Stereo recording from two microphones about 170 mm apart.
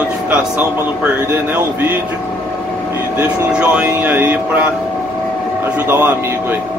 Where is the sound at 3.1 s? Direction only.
5° right (ahead or behind).